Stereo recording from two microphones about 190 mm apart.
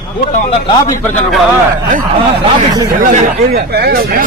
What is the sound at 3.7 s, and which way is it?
Speech, 55° right (ahead or behind).